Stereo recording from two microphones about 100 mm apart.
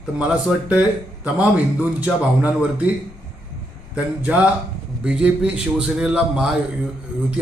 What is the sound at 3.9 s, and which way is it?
Speech, 15° right (ahead or behind).